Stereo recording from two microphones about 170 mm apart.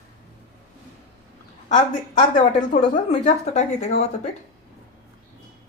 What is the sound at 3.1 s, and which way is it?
Speech, 40° left (ahead or behind).